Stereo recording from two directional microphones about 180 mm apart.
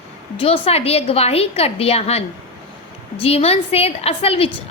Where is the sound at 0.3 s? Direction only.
30° left (ahead or behind).